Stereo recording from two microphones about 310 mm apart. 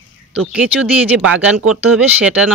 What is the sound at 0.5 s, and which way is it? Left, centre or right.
Speech, centre.